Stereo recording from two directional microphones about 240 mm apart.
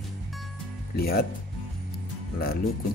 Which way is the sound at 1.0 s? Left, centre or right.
Left.